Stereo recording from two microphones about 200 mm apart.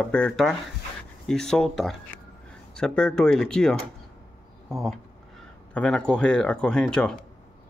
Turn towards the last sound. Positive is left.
turn(degrees=5)  # may be behind; listen again after turning